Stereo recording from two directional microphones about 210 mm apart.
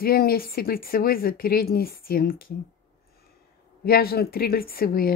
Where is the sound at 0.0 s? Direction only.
45° left (ahead or behind).